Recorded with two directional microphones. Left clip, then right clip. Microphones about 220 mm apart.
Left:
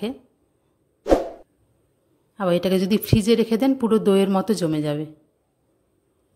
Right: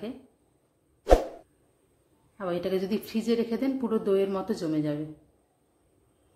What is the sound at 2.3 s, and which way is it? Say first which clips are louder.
Speech: left 9 dB; 45° left (ahead or behind).